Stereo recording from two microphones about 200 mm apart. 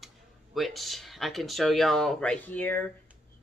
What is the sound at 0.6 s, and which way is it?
Speech, centre (ahead or behind).